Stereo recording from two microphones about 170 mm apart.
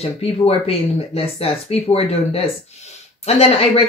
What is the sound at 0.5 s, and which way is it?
Speech, 35° left (ahead or behind).